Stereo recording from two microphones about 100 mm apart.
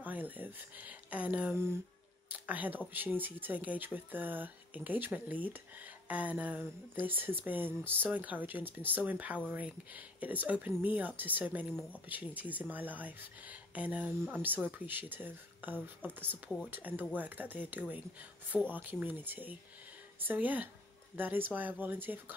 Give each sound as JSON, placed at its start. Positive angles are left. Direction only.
{"t": 0.0, "sound": "speech", "side_deg": -15}